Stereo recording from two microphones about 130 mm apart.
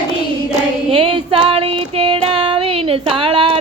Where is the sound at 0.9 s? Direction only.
45° right (ahead or behind).